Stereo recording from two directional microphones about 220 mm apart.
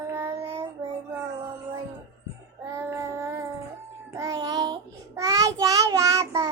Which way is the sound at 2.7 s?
10° right (ahead or behind).